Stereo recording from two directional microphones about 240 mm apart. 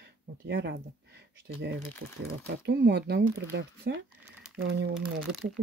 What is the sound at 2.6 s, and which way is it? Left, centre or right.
Speech, right.